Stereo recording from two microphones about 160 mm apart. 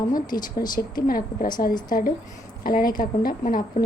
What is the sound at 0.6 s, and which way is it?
Speech, 25° left (ahead or behind).